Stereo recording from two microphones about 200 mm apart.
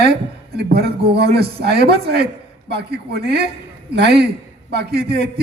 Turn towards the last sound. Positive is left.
turn(degrees=-55)  # may be behind; listen again after turning